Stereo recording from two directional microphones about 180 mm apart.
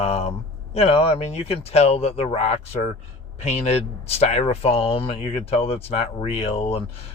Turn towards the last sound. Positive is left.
turn(degrees=35)  # may be behind; listen again after turning